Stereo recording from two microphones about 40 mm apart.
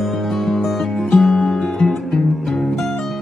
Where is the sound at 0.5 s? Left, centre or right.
Centre.